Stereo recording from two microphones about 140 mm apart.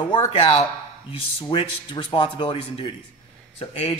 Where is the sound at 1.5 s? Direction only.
40° left (ahead or behind).